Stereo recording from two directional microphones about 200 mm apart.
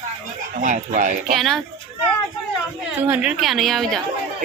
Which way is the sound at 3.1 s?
5° right (ahead or behind).